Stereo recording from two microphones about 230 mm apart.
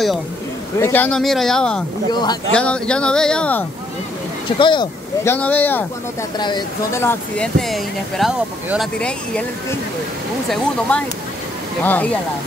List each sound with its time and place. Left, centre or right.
0.7 s speech: centre
4.6 s speech: left
5.3 s speech: centre
6.3 s speech: centre
10.5 s speech: centre